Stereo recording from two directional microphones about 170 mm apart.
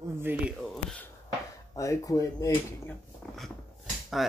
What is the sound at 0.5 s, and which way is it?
Speech, 5° left (ahead or behind).